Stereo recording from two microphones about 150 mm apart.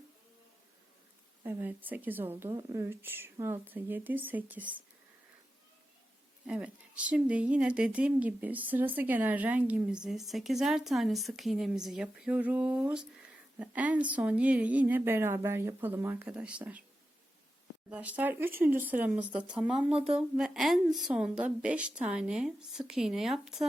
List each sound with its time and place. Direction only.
1.5 s speech: 10° right (ahead or behind)
6.5 s speech: 10° right (ahead or behind)
17.9 s speech: 10° right (ahead or behind)